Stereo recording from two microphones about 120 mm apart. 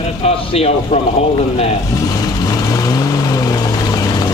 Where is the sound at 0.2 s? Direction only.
55° left (ahead or behind).